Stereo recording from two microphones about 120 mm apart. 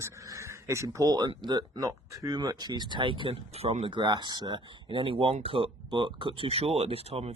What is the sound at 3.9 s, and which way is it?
Speech, 40° right (ahead or behind).